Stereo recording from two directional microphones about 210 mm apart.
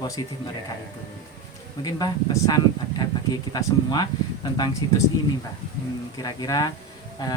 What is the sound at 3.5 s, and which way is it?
Speech, 20° left (ahead or behind).